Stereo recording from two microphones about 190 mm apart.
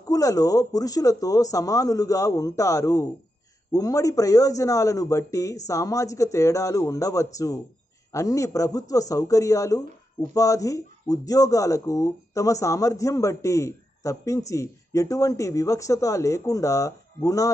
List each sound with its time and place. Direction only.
0.1 s speech: 20° left (ahead or behind)